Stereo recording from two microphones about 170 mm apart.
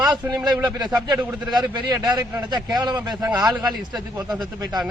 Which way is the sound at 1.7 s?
25° right (ahead or behind).